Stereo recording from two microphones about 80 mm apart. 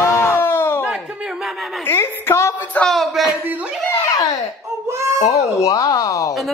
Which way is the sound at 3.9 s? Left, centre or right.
Left.